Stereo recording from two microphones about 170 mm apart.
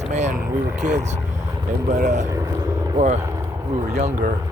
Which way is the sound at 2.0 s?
45° right (ahead or behind).